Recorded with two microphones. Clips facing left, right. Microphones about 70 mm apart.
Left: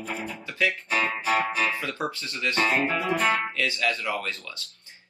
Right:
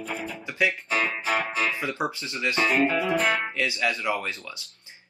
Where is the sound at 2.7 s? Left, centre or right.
Left.